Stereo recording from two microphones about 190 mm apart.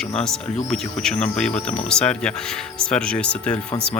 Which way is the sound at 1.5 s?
30° left (ahead or behind).